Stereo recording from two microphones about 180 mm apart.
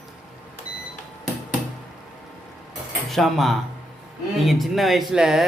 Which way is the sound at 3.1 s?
Centre (ahead or behind).